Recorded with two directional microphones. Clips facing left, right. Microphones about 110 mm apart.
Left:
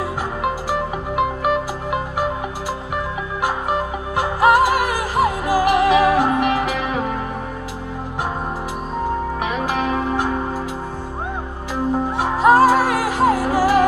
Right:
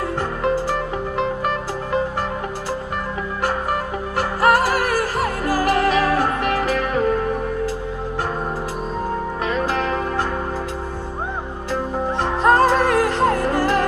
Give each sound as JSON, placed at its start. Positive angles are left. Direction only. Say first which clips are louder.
{"t": 0.4, "sound": "music", "louder": "right 1 dB", "side_deg": 10}
{"t": 3.4, "sound": "music", "louder": "left 1 dB", "side_deg": 15}
{"t": 9.5, "sound": "music", "louder": "right 1 dB", "side_deg": 15}
{"t": 11.7, "sound": "music", "louder": "left 2 dB", "side_deg": 10}